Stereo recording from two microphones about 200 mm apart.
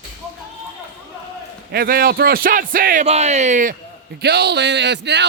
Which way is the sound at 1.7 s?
50° right (ahead or behind).